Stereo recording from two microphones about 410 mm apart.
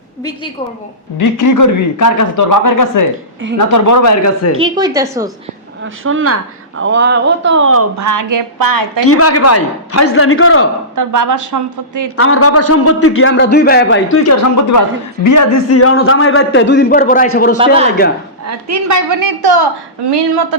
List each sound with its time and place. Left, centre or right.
0.2 s a woman's voice: centre
1.2 s a man's voice: left
4.5 s a woman's voice: centre
6.0 s speech: right
9.0 s a man's voice: left
10.9 s a woman's voice: right
12.0 s a man's voice: left
18.4 s a woman's voice: right